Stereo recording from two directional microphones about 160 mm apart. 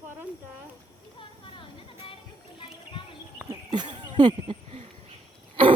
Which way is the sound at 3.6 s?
30° right (ahead or behind).